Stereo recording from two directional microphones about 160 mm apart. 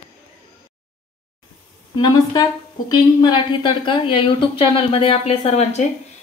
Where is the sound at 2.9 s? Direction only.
25° left (ahead or behind).